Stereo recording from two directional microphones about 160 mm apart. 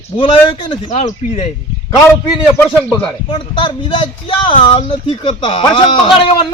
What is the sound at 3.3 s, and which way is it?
Speech, 30° left (ahead or behind).